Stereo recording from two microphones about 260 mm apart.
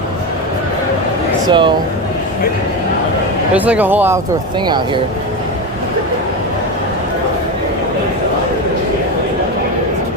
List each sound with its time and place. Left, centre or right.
1.5 s speech: centre
3.5 s speech: centre